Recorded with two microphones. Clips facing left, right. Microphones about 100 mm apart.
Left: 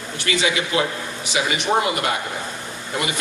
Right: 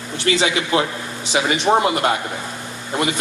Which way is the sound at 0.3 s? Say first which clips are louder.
Right 3 dB; 30° right (ahead or behind).